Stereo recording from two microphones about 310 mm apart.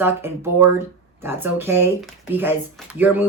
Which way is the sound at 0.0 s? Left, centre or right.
Centre.